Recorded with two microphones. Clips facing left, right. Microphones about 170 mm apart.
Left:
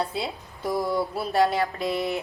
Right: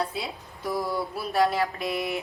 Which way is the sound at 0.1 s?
25° left (ahead or behind).